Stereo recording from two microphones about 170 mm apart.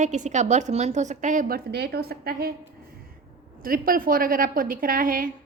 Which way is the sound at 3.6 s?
60° right (ahead or behind).